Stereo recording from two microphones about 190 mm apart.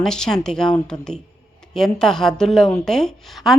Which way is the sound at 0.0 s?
5° left (ahead or behind).